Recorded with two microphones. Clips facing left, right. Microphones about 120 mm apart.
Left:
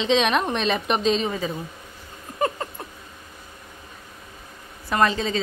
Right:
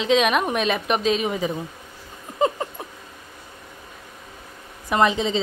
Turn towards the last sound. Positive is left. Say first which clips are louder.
# right 2 dB
turn(degrees=-20)  # may be behind; listen again after turning